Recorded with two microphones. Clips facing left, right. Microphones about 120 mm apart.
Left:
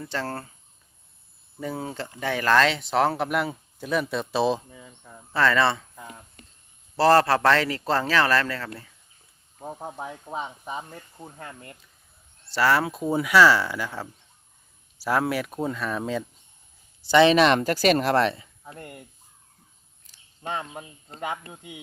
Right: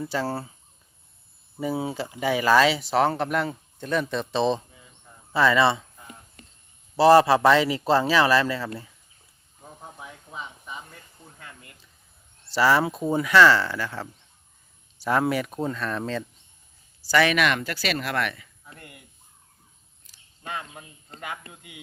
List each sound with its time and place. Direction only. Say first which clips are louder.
0.0 s speech: right 3 dB; 10° right (ahead or behind)
1.5 s speech: right 4 dB; 10° right (ahead or behind)
5.3 s speech: right 2 dB; 10° right (ahead or behind)
6.9 s speech: right 3 dB; 5° right (ahead or behind)
9.6 s speech: left 8 dB; 50° left (ahead or behind)
12.5 s speech: right 1 dB; centre (ahead or behind)
17.0 s speech: left 5 dB; 20° left (ahead or behind); by 19.0 s 40° left (ahead or behind)
20.4 s speech: left 4 dB; 30° left (ahead or behind)